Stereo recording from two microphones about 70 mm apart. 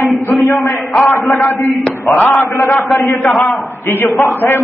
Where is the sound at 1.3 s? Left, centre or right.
Centre.